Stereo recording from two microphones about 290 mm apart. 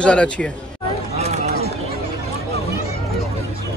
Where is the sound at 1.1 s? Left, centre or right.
Right.